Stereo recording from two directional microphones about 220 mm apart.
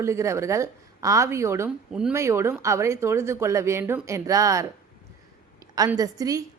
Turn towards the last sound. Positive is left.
turn(degrees=-15)  # may be behind; listen again after turning